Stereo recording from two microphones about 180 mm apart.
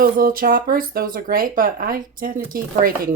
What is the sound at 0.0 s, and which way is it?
Speech, 55° right (ahead or behind).